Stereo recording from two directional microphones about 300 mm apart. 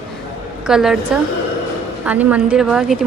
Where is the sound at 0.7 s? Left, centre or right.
Centre.